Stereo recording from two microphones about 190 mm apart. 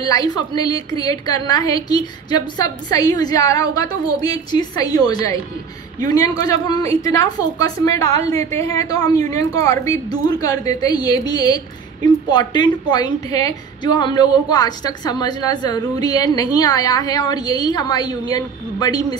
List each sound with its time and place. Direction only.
0.0 s a woman's voice: 20° left (ahead or behind)